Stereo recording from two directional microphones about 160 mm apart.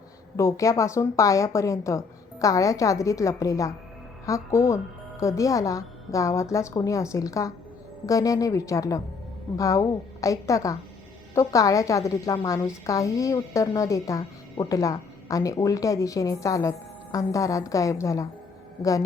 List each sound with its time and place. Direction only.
0.3 s a woman's voice: 20° left (ahead or behind)